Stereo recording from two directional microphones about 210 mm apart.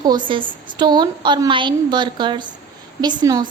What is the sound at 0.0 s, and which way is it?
A woman's voice, 20° right (ahead or behind).